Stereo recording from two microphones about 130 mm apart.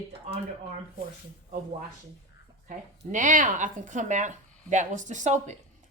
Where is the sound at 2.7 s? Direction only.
75° right (ahead or behind).